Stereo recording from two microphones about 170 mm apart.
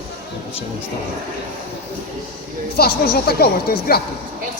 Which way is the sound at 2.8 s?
65° left (ahead or behind).